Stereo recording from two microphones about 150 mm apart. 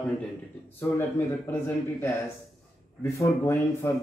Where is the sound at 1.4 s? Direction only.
15° left (ahead or behind).